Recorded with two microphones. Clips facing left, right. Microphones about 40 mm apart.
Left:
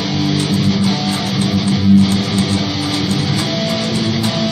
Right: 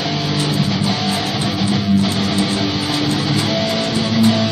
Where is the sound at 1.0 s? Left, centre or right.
Centre.